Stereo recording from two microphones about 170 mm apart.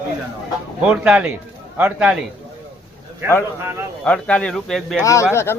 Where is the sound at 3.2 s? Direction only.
15° right (ahead or behind).